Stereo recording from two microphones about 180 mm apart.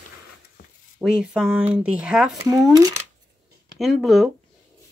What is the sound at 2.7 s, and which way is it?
Speech, 20° right (ahead or behind).